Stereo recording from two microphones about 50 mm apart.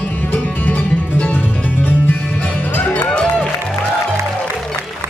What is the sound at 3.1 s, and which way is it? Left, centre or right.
Music, left.